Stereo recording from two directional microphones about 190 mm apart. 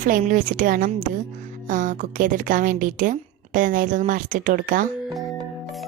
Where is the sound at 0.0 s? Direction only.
45° right (ahead or behind).